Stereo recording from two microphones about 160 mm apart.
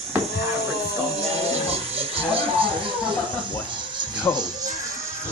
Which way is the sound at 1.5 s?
40° right (ahead or behind).